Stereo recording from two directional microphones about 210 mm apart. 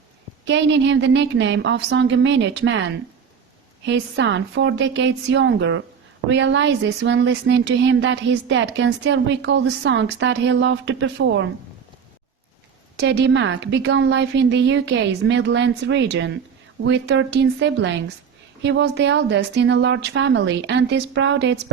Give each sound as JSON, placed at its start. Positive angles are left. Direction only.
{"t": 0.4, "sound": "speech", "side_deg": -55}
{"t": 13.0, "sound": "speech", "side_deg": -55}